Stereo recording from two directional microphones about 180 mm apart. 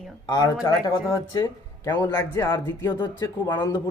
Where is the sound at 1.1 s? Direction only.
15° left (ahead or behind).